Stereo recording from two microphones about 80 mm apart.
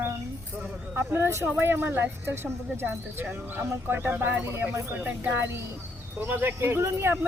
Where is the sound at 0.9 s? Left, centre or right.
Right.